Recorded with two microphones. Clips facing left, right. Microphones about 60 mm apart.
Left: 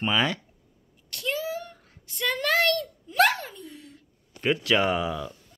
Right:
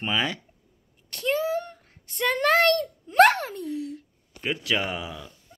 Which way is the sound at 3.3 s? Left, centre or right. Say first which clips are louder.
Right 6 dB; right.